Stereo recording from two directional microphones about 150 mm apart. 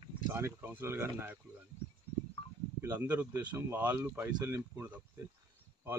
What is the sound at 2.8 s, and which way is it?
Speech, 10° right (ahead or behind).